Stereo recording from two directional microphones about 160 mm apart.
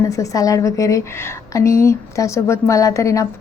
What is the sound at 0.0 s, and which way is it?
A woman's voice, 20° left (ahead or behind).